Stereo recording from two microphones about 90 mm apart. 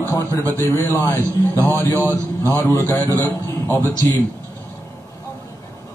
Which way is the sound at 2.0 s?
30° right (ahead or behind).